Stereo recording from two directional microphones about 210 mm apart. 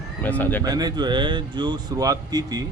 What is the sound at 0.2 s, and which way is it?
Speech, 10° left (ahead or behind).